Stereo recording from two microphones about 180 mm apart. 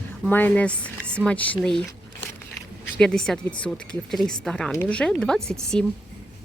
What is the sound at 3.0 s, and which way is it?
Speech, 5° left (ahead or behind).